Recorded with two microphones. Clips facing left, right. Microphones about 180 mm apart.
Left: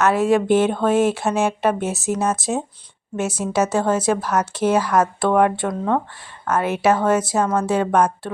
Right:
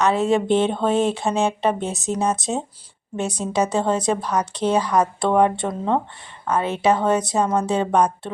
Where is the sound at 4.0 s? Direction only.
5° left (ahead or behind).